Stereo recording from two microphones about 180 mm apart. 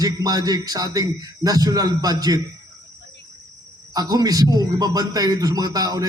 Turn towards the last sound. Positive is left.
turn(degrees=-20)  # may be behind; listen again after turning